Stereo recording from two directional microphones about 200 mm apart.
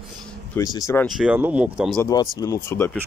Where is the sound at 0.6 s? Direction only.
15° left (ahead or behind).